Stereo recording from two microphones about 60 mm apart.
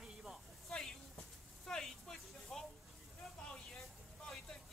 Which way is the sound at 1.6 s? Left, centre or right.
Centre.